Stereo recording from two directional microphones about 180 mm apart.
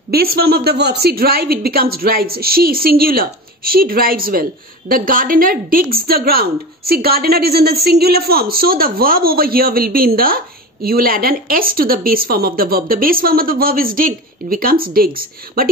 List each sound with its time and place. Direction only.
0.1 s a woman's voice: 60° right (ahead or behind)